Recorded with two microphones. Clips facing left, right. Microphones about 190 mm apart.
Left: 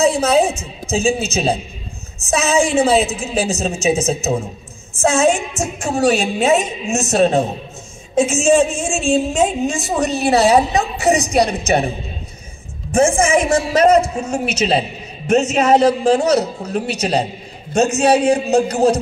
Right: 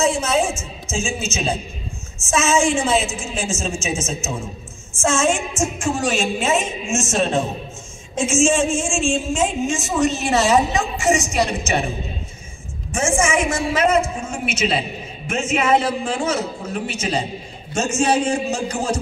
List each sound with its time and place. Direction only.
0.0 s music: 35° left (ahead or behind)
0.8 s a man's voice: 35° left (ahead or behind)
12.9 s a man's voice: 35° left (ahead or behind)
17.7 s a man's voice: 65° left (ahead or behind)